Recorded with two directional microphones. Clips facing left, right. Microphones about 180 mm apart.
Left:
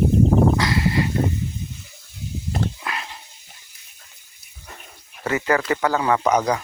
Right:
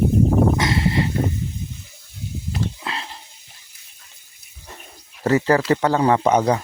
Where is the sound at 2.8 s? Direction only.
25° right (ahead or behind).